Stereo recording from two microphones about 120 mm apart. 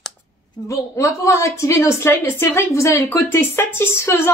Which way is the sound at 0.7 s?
25° left (ahead or behind).